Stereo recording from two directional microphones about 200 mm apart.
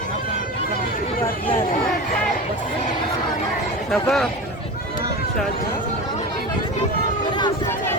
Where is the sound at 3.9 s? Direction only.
Centre (ahead or behind).